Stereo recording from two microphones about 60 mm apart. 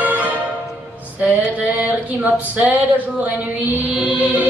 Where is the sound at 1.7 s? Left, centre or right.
Right.